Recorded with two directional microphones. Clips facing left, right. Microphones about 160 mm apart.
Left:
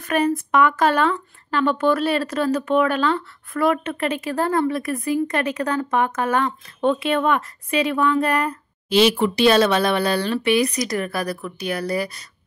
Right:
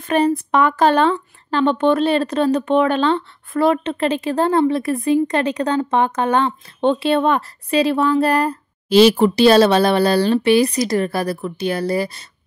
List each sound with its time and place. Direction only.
0.0 s speech: 30° right (ahead or behind)